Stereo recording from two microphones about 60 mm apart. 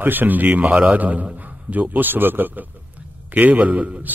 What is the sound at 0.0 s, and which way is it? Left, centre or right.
A man's voice, right.